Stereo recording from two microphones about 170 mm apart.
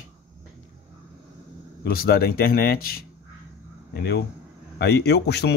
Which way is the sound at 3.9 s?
75° left (ahead or behind).